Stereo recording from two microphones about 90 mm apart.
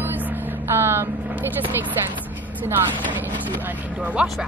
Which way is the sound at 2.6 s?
20° right (ahead or behind).